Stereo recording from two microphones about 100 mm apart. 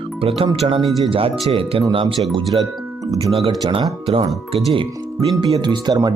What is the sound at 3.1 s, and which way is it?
Speech, 75° right (ahead or behind).